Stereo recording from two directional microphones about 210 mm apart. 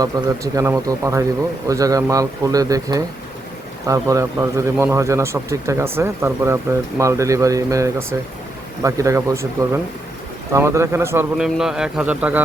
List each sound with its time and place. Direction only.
0.0 s speech: 15° right (ahead or behind)